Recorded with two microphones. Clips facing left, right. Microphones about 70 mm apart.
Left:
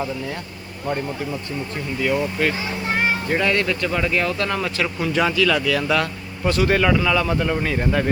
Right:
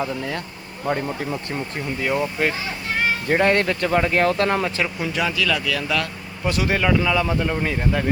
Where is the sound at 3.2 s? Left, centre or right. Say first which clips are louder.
Right 2 dB; right.